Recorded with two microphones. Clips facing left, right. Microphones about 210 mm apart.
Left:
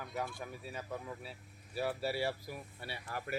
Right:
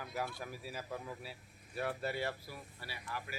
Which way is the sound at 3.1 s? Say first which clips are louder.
Left 3 dB; 50° left (ahead or behind).